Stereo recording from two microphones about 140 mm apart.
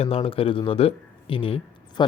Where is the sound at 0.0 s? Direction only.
40° left (ahead or behind).